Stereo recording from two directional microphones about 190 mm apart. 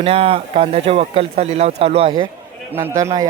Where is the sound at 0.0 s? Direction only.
30° right (ahead or behind).